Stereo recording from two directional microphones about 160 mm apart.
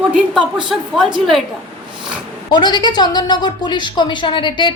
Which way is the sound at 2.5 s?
30° left (ahead or behind).